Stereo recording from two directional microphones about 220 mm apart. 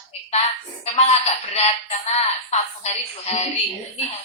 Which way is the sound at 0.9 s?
30° left (ahead or behind).